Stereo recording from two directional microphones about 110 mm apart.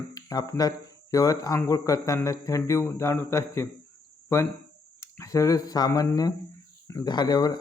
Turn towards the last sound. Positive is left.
turn(degrees=40)  # may be behind; listen again after turning